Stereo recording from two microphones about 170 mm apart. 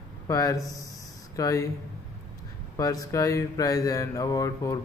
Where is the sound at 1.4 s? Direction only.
20° left (ahead or behind).